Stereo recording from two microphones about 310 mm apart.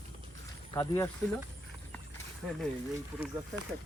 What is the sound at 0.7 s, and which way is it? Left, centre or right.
Speech, centre.